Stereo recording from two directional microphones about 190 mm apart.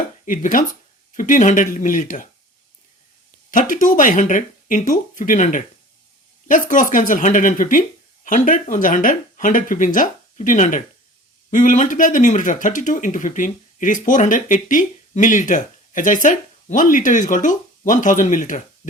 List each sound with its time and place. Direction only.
0.3 s speech: 45° left (ahead or behind)
3.5 s speech: 45° left (ahead or behind)